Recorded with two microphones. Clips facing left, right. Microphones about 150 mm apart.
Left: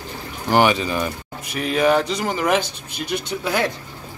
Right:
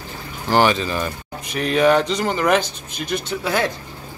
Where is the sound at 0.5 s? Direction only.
15° left (ahead or behind).